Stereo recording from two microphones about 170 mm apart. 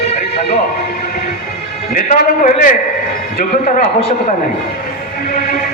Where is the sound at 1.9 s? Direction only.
50° left (ahead or behind).